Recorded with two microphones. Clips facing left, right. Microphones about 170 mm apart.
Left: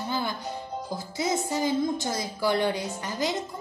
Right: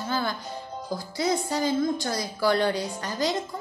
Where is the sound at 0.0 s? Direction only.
20° left (ahead or behind).